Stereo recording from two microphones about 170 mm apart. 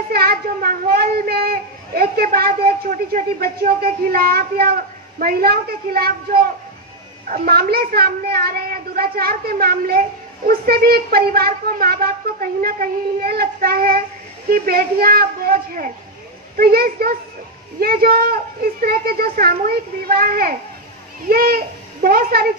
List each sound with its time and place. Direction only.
0.1 s a woman's voice: 60° right (ahead or behind)